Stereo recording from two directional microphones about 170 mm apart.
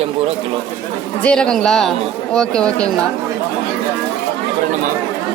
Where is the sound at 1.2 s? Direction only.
5° left (ahead or behind).